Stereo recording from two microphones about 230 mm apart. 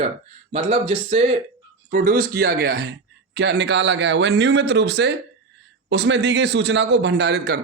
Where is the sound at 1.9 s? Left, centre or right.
Right.